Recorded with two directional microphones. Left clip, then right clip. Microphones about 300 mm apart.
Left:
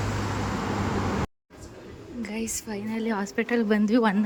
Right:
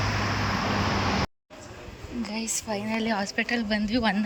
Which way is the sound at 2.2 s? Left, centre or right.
Centre.